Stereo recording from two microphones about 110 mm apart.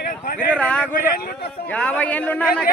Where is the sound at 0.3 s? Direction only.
10° left (ahead or behind).